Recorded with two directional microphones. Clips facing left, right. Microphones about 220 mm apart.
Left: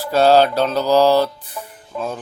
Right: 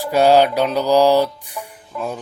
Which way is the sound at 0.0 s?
15° right (ahead or behind).